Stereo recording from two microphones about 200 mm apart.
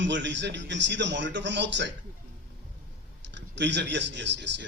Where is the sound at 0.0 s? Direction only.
65° right (ahead or behind).